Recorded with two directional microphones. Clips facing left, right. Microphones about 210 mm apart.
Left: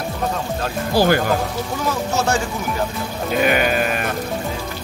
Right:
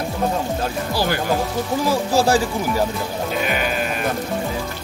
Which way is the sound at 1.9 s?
30° right (ahead or behind).